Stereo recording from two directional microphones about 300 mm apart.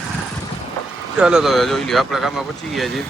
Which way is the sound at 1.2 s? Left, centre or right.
Centre.